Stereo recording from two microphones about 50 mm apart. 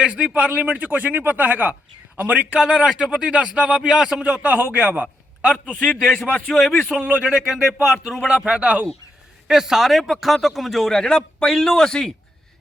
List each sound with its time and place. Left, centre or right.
0.3 s speech: right
2.6 s speech: centre
4.4 s a man's voice: right
5.6 s a man's voice: left
6.5 s speech: centre
7.0 s a man's voice: right
7.3 s speech: centre
8.3 s a man's voice: centre
9.5 s speech: centre